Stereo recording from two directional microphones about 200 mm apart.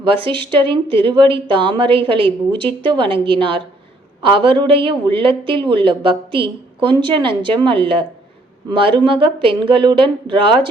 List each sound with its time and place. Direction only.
0.0 s speech: 25° right (ahead or behind)